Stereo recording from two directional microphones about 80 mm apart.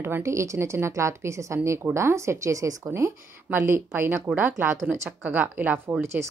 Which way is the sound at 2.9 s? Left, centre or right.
Right.